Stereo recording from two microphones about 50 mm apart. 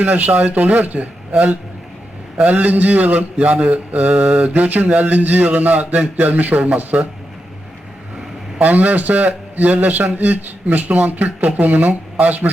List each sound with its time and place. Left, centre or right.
0.0 s mantra: right
8.5 s mantra: right